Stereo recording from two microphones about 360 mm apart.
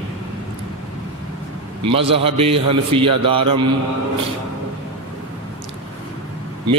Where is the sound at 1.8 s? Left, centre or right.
Centre.